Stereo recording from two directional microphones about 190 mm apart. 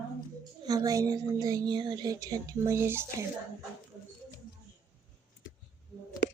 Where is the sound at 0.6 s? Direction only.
20° right (ahead or behind).